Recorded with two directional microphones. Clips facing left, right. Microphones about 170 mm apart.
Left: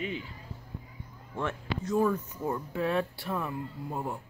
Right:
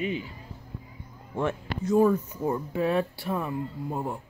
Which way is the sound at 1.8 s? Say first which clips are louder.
Right 6 dB; 10° right (ahead or behind).